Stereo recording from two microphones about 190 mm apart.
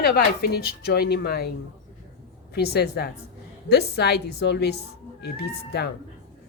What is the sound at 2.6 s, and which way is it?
A woman's voice, 60° left (ahead or behind).